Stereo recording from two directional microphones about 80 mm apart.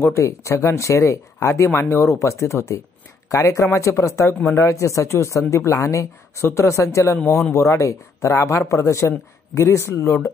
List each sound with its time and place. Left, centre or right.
0.0 s speech: left